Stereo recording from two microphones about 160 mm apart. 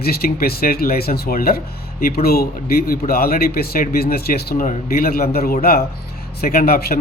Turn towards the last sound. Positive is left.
turn(degrees=70)  # may be behind; listen again after turning